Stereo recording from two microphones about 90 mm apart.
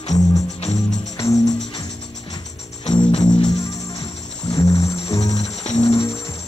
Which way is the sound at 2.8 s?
90° left.